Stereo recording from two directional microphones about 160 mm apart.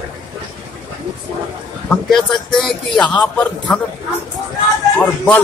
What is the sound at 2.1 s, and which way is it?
Speech, centre (ahead or behind).